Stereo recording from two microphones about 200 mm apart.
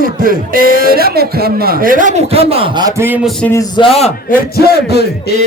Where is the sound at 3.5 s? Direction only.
25° left (ahead or behind).